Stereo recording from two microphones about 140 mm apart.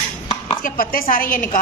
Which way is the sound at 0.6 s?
90° left.